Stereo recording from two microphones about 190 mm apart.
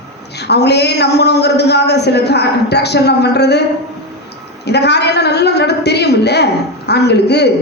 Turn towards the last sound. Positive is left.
turn(degrees=60)  # may be behind; listen again after turning